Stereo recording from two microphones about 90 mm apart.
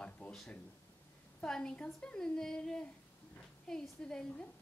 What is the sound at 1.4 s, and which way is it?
A woman's voice, 10° left (ahead or behind).